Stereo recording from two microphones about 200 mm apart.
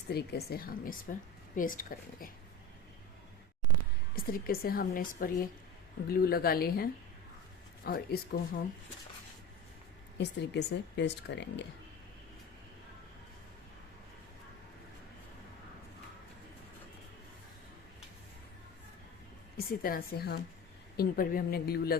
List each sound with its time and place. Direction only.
0.1 s a woman's voice: 55° left (ahead or behind)
4.1 s a woman's voice: 45° left (ahead or behind)
10.2 s speech: 60° left (ahead or behind)
19.5 s a woman's voice: 50° left (ahead or behind)